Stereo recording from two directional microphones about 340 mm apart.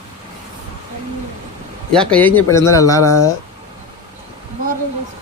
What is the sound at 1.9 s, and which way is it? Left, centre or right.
Speech, centre.